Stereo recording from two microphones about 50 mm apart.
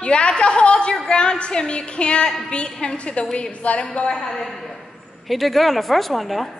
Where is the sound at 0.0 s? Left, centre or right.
Centre.